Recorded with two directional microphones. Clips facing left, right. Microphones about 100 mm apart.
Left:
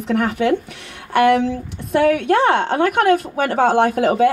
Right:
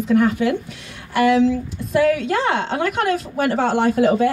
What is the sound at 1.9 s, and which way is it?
A woman's voice, 60° left (ahead or behind).